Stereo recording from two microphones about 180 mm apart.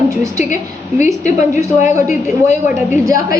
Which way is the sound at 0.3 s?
40° left (ahead or behind).